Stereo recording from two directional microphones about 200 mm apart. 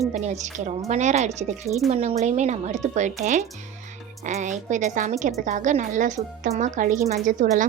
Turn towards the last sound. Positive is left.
turn(degrees=-40)  # may be behind; listen again after turning